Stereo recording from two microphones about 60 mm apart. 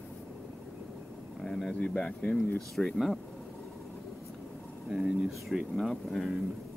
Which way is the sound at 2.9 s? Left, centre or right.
Centre.